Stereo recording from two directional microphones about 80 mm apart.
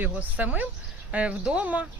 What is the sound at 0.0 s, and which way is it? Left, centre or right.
Speech, centre.